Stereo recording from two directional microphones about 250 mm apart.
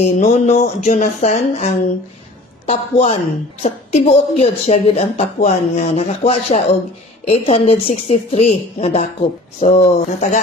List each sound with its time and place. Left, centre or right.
0.0 s speech: left